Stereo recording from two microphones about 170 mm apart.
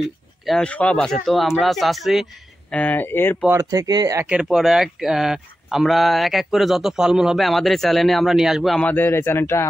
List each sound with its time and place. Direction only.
0.5 s speech: 5° left (ahead or behind)
2.7 s speech: 10° left (ahead or behind)
3.4 s speech: 20° right (ahead or behind)
4.3 s speech: 5° right (ahead or behind); by 9.7 s 15° left (ahead or behind)